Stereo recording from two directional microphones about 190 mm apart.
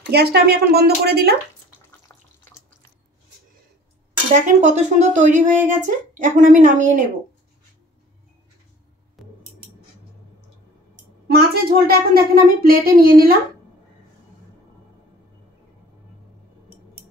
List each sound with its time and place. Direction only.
0.1 s speech: 55° right (ahead or behind)
4.3 s a woman's voice: 40° right (ahead or behind)
9.2 s music: centre (ahead or behind)
11.3 s speech: 55° right (ahead or behind)